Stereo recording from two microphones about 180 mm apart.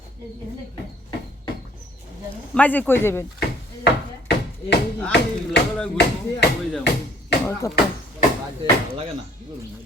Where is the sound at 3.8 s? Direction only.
70° left (ahead or behind).